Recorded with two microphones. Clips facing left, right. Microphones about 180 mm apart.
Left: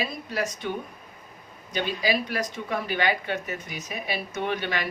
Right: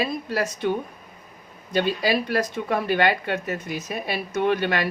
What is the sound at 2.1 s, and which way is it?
Speech, 55° right (ahead or behind).